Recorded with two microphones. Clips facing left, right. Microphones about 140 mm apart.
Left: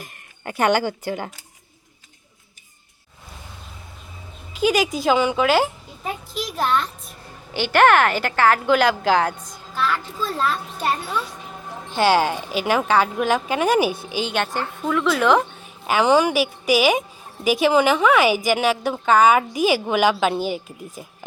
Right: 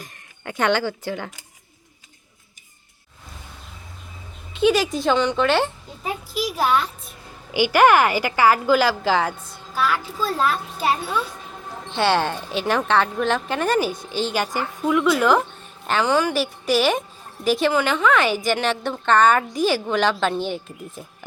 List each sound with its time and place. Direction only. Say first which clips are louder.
0.5 s speech: left 2 dB; 10° left (ahead or behind)
4.5 s a woman's voice: right 1 dB; centre (ahead or behind)
16.3 s a woman's voice: left 2 dB; 5° left (ahead or behind)